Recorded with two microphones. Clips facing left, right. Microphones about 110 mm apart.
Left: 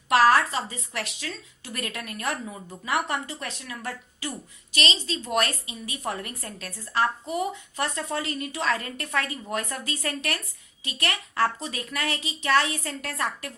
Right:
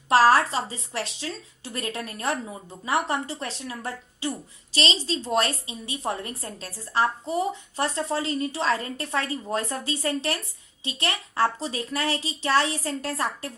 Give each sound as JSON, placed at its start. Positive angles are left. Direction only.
{"t": 0.1, "sound": "a woman's voice", "side_deg": -35}